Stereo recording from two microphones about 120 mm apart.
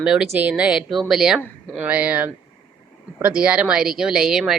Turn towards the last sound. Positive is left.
turn(degrees=-5)  # may be behind; listen again after turning